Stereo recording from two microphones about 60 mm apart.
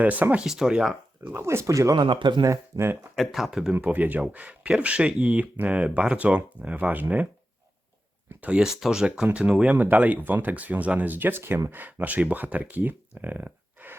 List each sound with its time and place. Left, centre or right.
0.0 s speech: right
0.4 s speech: centre
1.3 s speech: right
2.7 s speech: right
3.2 s speech: centre
3.8 s speech: right
8.4 s speech: centre
9.5 s speech: centre
9.7 s speech: right
11.7 s speech: right